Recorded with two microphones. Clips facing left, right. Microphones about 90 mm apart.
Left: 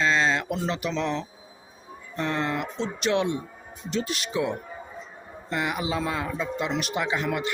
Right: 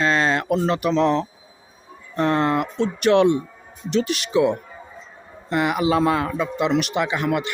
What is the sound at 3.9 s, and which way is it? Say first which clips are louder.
A man's voice: right 7 dB; 75° right (ahead or behind).